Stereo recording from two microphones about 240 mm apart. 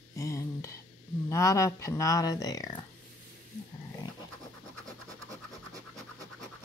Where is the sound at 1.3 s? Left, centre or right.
Centre.